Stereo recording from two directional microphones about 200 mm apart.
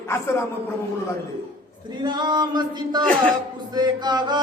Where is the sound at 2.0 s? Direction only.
20° right (ahead or behind).